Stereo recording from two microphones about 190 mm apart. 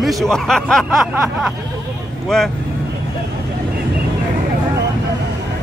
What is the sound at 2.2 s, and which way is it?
Speech, centre (ahead or behind).